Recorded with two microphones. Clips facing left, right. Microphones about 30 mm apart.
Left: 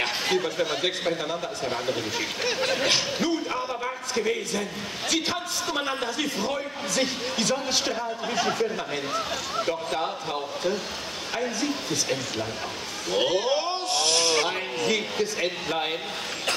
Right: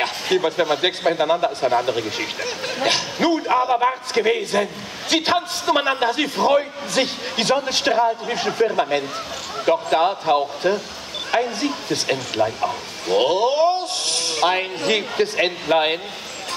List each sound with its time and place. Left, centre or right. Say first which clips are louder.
0.4 s speech: right 7 dB; right
1.7 s speech: right 5 dB; right
2.4 s a sound: left 1 dB; centre
3.2 s a man's voice: right 8 dB; right